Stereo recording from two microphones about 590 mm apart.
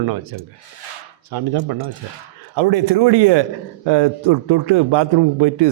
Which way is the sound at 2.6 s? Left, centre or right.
Right.